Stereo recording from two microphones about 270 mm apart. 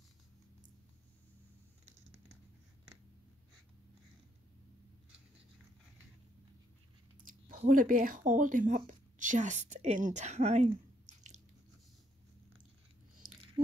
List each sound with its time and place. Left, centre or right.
7.4 s speech: right